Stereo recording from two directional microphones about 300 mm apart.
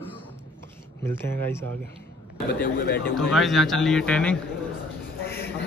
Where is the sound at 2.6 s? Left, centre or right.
Left.